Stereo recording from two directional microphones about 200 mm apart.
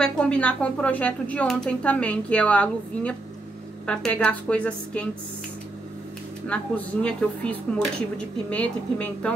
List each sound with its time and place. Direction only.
0.0 s speech: 5° left (ahead or behind)
6.4 s speech: 5° left (ahead or behind)